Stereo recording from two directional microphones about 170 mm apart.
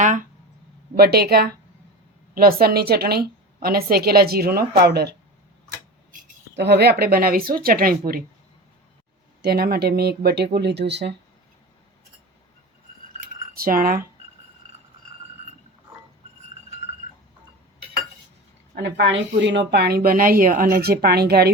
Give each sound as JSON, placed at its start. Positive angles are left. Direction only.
{"t": 0.0, "sound": "speech", "side_deg": -50}
{"t": 0.9, "sound": "a woman's voice", "side_deg": -65}
{"t": 6.6, "sound": "a woman's voice", "side_deg": -80}
{"t": 9.4, "sound": "speech", "side_deg": -65}
{"t": 13.5, "sound": "speech", "side_deg": -60}
{"t": 18.7, "sound": "a woman's voice", "side_deg": -90}